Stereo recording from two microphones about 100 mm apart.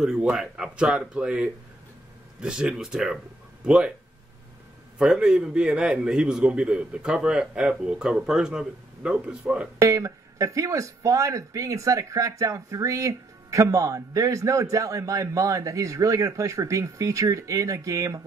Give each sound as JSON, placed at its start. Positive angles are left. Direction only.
{"t": 0.0, "sound": "a man's voice", "side_deg": -5}
{"t": 4.9, "sound": "a man's voice", "side_deg": -5}
{"t": 9.8, "sound": "speech", "side_deg": -30}